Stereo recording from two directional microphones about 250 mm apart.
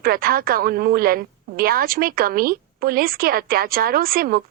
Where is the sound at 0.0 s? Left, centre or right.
Right.